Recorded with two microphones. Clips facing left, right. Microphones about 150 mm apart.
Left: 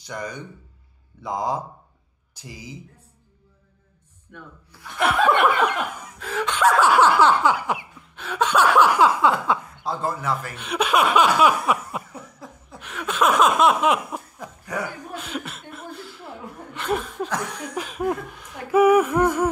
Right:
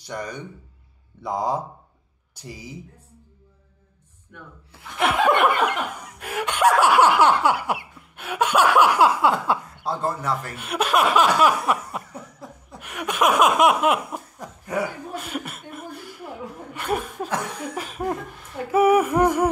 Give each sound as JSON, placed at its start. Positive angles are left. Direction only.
{"t": 4.7, "sound": "laughter", "side_deg": -20}
{"t": 15.1, "sound": "chuckle", "side_deg": -5}
{"t": 16.7, "sound": "speech", "side_deg": -10}